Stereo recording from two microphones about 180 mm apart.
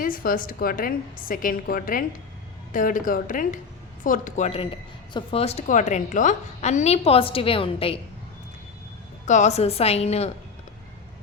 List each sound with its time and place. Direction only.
0.0 s a woman's voice: 50° left (ahead or behind); by 7.9 s 30° left (ahead or behind)
9.2 s a woman's voice: 40° left (ahead or behind)